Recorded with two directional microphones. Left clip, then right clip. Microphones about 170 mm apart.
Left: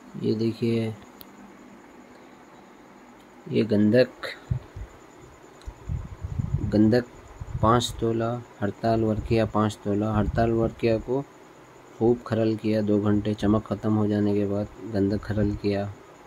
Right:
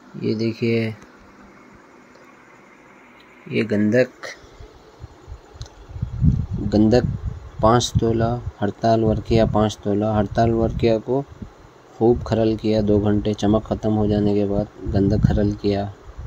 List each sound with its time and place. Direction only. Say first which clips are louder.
0.4 s speech: right 4 dB; 10° right (ahead or behind)
3.4 s speech: right 2 dB; 10° left (ahead or behind)
6.7 s speech: right 5 dB; 15° right (ahead or behind)